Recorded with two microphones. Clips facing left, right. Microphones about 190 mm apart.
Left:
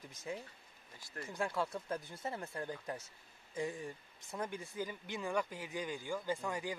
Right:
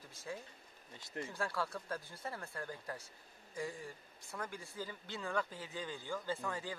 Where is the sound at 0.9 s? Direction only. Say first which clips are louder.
Right 4 dB; 20° right (ahead or behind).